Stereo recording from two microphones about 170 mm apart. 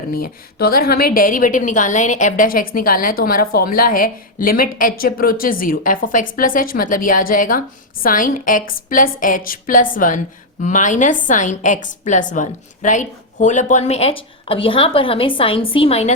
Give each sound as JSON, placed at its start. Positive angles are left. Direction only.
{"t": 0.1, "sound": "a woman's voice", "side_deg": 60}